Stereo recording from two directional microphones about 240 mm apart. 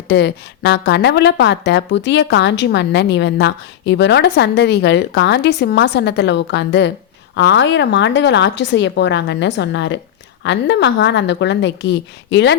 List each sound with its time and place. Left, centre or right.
0.1 s a woman's voice: left